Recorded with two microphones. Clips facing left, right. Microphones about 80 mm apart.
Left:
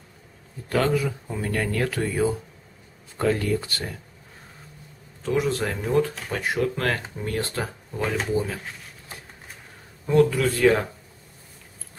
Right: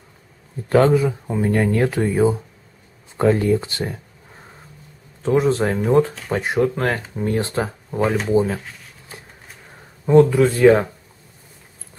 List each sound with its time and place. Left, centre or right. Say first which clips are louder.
0.7 s speech: right 8 dB; right
5.2 s speech: right 7 dB; right
10.0 s speech: right 6 dB; right